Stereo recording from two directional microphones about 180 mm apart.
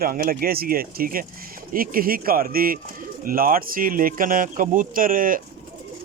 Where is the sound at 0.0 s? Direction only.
55° right (ahead or behind).